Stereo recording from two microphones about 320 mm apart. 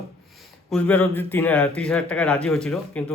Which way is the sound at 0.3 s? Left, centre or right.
Centre.